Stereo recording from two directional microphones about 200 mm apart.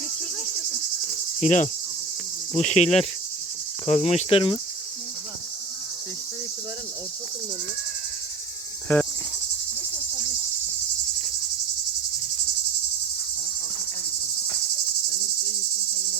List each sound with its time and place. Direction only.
1.4 s cricket: 35° left (ahead or behind)
8.9 s cricket: 5° left (ahead or behind)